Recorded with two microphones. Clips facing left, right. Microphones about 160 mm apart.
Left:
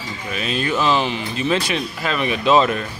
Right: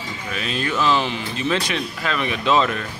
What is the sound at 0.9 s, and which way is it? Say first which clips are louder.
Speech: left 2 dB; 5° left (ahead or behind).